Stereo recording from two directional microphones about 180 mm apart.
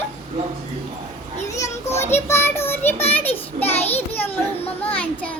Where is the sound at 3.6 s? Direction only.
35° left (ahead or behind).